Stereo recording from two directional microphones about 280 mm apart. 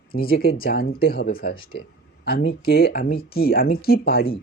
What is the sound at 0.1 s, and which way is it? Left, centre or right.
Speech, left.